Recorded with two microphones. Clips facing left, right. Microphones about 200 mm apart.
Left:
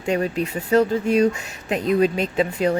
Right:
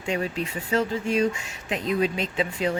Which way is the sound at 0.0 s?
40° left (ahead or behind).